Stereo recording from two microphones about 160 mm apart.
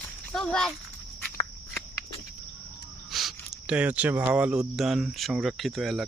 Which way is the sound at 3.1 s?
Centre (ahead or behind).